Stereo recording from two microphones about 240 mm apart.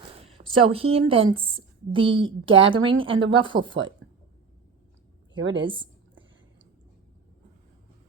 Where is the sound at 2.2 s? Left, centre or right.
Right.